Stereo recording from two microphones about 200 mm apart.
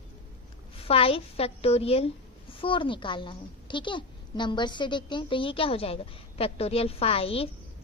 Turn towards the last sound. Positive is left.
turn(degrees=30)  # may be behind; listen again after turning